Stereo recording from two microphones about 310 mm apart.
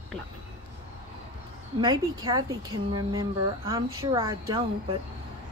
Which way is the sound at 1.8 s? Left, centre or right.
Centre.